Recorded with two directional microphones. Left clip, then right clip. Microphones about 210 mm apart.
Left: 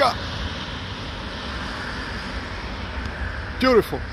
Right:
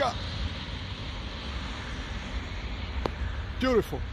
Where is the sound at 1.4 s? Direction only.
45° left (ahead or behind).